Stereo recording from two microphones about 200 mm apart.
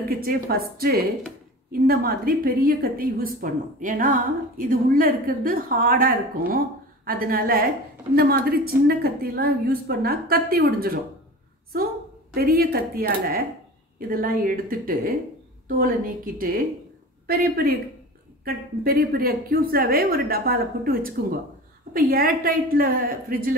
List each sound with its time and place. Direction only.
0.1 s a woman's voice: 45° right (ahead or behind)
12.4 s a woman's voice: 50° right (ahead or behind)